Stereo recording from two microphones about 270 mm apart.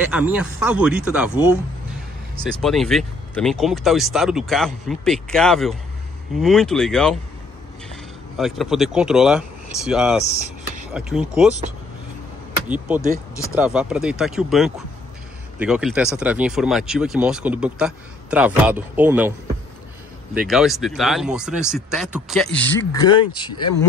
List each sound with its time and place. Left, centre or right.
0.1 s speech: centre
2.6 s speech: centre
12.6 s speech: centre
20.3 s speech: centre